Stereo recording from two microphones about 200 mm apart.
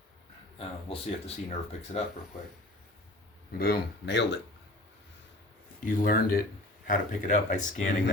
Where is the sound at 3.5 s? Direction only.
50° left (ahead or behind).